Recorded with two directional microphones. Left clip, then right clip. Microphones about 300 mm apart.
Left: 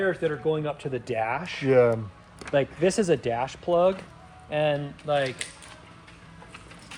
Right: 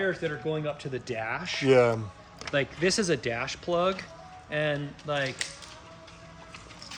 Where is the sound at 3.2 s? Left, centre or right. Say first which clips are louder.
Left 4 dB; centre.